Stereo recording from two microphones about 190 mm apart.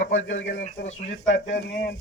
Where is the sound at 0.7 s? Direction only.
40° left (ahead or behind).